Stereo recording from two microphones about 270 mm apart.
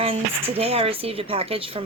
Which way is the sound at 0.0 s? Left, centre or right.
Right.